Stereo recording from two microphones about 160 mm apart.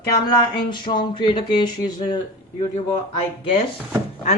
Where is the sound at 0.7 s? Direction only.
30° left (ahead or behind).